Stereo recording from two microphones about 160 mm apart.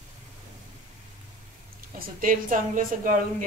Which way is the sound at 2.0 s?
60° right (ahead or behind).